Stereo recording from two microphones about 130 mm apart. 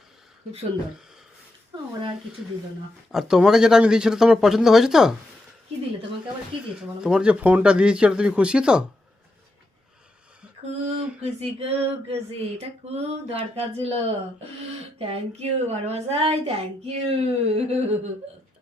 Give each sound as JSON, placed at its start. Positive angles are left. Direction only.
{"t": 3.1, "sound": "speech", "side_deg": -5}
{"t": 6.7, "sound": "speech", "side_deg": -5}
{"t": 10.7, "sound": "a sound", "side_deg": -60}